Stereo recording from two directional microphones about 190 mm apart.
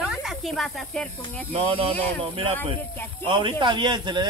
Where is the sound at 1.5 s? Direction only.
30° right (ahead or behind).